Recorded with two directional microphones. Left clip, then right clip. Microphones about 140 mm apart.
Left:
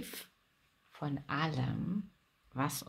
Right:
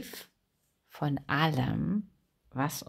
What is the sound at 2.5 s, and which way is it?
Speech, 35° right (ahead or behind).